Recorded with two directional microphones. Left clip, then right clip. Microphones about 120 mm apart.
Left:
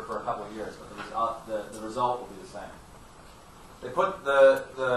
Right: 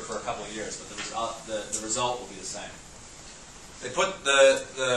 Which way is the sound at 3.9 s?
30° right (ahead or behind).